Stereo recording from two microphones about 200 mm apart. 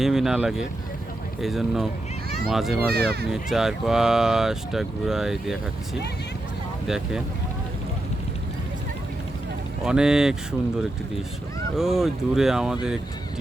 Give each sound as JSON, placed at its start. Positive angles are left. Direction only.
{"t": 0.0, "sound": "speech", "side_deg": 0}
{"t": 2.8, "sound": "speech", "side_deg": -50}
{"t": 3.2, "sound": "speech", "side_deg": 0}
{"t": 9.8, "sound": "speech", "side_deg": -5}
{"t": 11.8, "sound": "speech", "side_deg": 0}